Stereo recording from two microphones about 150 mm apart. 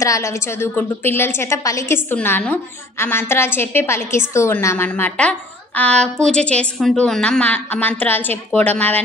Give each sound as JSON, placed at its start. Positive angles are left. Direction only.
{"t": 0.0, "sound": "a woman's voice", "side_deg": 20}